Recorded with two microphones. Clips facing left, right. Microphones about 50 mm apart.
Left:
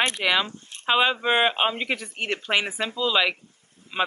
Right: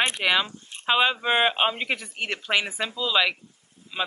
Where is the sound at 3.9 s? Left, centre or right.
Left.